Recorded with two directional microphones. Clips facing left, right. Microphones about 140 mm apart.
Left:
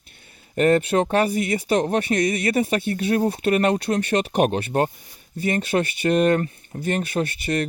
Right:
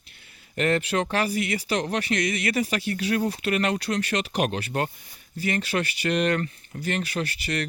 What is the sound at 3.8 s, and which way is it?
Speech, 50° left (ahead or behind).